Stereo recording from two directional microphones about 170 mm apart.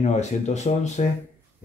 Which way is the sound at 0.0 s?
40° left (ahead or behind).